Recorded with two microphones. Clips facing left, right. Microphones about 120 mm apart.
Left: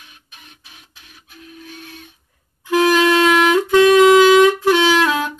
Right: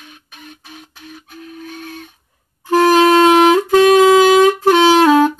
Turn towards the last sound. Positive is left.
turn(degrees=-40)  # may be behind; listen again after turning